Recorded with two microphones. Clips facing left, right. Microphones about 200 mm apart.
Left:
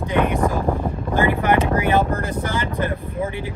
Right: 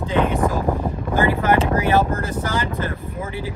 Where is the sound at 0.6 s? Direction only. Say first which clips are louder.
Even; 5° right (ahead or behind).